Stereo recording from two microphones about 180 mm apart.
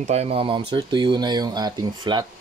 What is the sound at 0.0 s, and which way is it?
Speech, 35° right (ahead or behind).